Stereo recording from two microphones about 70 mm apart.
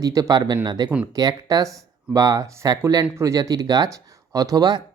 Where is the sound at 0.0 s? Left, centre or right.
Right.